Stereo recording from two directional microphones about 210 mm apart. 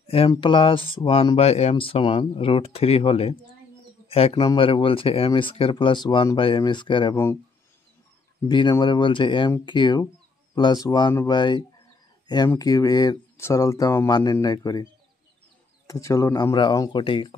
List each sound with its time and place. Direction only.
0.0 s a sound: 30° left (ahead or behind)
0.3 s speech: 25° left (ahead or behind)
8.5 s speech: 20° left (ahead or behind)
15.9 s speech: 15° left (ahead or behind)